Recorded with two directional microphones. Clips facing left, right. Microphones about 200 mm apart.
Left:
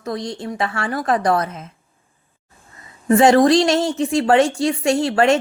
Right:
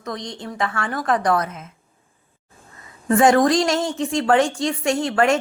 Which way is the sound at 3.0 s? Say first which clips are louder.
Left 3 dB; 25° left (ahead or behind).